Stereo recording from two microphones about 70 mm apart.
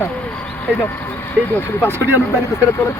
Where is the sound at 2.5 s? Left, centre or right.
Left.